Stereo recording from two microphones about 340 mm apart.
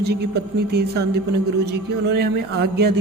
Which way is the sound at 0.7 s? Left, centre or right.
Right.